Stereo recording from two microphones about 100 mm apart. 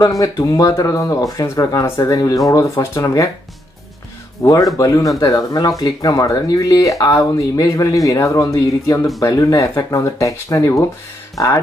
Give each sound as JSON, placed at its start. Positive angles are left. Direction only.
{"t": 0.2, "sound": "speech", "side_deg": 35}
{"t": 4.4, "sound": "speech", "side_deg": 35}